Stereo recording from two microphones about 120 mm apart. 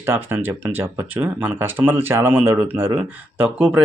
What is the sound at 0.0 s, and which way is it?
Speech, 20° right (ahead or behind).